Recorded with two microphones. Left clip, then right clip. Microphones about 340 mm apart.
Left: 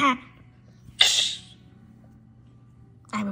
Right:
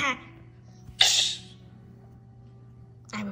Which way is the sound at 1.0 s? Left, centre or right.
Centre.